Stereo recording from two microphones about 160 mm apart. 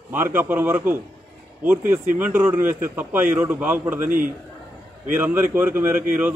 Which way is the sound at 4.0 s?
60° right (ahead or behind).